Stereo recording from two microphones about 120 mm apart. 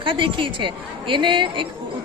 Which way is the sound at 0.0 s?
45° right (ahead or behind).